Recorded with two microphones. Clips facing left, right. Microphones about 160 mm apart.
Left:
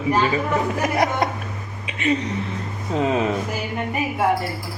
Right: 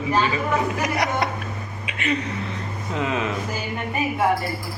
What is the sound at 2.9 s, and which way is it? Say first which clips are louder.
Speech: left 5 dB; 35° left (ahead or behind).